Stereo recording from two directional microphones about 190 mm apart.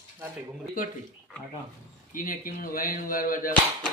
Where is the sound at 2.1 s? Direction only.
45° left (ahead or behind).